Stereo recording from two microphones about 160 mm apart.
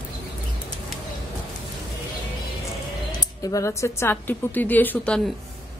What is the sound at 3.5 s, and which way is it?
A woman's voice, 20° left (ahead or behind).